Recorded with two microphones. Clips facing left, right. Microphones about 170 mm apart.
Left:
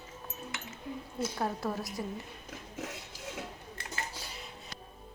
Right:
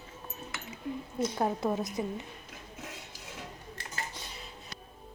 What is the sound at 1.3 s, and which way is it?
Speech, 20° right (ahead or behind).